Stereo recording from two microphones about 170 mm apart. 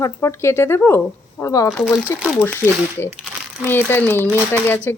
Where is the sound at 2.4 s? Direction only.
15° left (ahead or behind).